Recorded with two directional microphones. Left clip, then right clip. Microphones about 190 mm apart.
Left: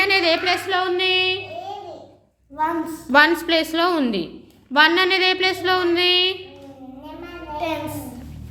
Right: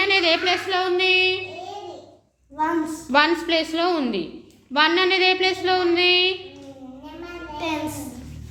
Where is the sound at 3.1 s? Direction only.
20° left (ahead or behind).